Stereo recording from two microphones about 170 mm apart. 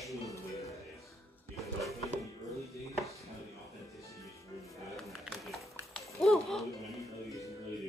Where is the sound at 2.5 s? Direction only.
Centre (ahead or behind).